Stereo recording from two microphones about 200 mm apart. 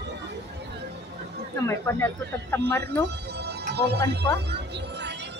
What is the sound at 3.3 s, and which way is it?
Music, 55° right (ahead or behind).